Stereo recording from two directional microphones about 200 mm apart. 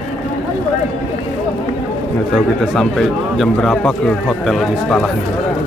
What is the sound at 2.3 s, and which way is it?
Speech, centre (ahead or behind).